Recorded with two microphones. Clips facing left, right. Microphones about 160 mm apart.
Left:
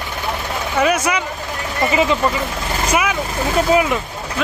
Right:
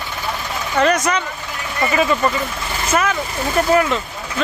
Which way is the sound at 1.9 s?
20° left (ahead or behind).